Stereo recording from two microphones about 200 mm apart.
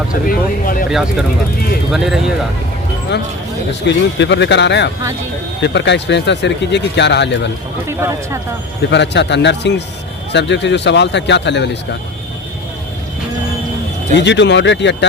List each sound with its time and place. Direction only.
0.1 s speech: 45° left (ahead or behind)
0.9 s speech: centre (ahead or behind)
3.8 s speech: 60° left (ahead or behind)
7.9 s speech: 15° right (ahead or behind)
8.9 s speech: 60° left (ahead or behind)
14.2 s speech: 60° left (ahead or behind)